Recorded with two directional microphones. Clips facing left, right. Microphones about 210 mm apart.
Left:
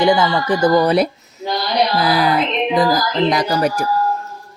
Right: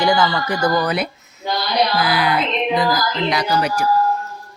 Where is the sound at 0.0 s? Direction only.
25° left (ahead or behind); by 3.8 s 45° left (ahead or behind).